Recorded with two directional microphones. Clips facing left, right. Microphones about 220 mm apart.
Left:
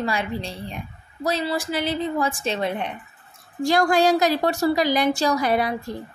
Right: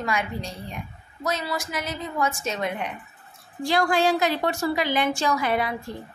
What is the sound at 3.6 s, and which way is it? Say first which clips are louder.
A woman's voice: left 3 dB; 40° left (ahead or behind).